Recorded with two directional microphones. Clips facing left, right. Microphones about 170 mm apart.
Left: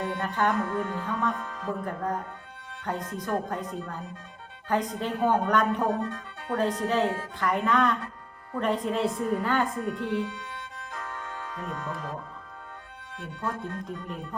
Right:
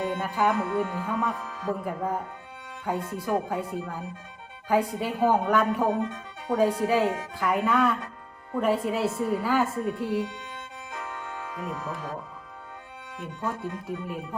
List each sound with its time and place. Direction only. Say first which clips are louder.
0.2 s a woman's voice: left 1 dB; 10° right (ahead or behind)
10.2 s music: left 1 dB; 20° right (ahead or behind)
11.4 s a woman's voice: right 1 dB; 5° right (ahead or behind)
13.4 s speech: right 1 dB; 5° right (ahead or behind)